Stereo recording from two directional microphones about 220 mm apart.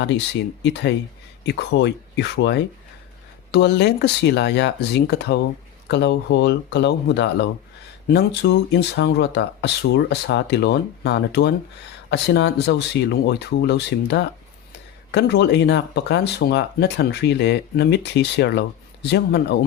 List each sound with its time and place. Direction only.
0.6 s speech: 50° left (ahead or behind)